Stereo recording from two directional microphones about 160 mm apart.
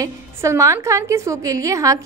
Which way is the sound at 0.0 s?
20° right (ahead or behind).